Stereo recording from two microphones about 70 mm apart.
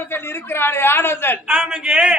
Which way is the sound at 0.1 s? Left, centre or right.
Left.